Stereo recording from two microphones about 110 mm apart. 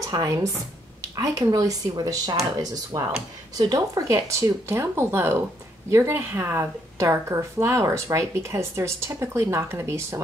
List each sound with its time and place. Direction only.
0.0 s a woman's voice: 30° right (ahead or behind)